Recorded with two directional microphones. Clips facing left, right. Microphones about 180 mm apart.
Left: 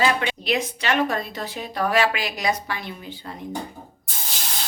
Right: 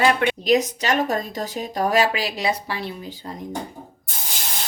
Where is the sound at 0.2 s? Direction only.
45° right (ahead or behind).